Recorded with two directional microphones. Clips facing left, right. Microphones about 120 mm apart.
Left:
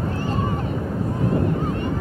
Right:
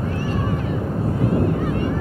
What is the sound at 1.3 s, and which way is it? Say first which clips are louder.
Honk: right 2 dB; 30° left (ahead or behind).